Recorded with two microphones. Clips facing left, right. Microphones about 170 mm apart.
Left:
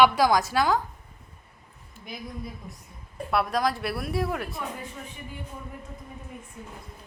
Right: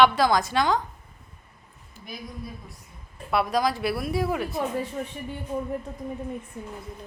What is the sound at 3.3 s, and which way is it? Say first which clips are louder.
Speech: right 2 dB; centre (ahead or behind).